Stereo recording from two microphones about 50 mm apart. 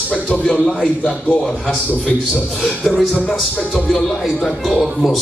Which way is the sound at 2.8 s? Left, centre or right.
Centre.